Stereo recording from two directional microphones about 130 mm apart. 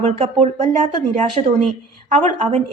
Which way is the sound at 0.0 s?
50° right (ahead or behind).